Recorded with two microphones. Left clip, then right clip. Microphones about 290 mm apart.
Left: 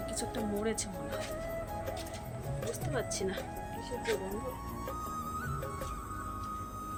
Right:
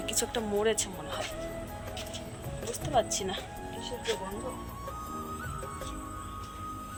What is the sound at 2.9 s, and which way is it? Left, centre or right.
Speech, centre.